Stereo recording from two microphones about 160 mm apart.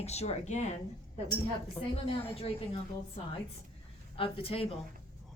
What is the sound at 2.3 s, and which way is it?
Speech, 40° left (ahead or behind).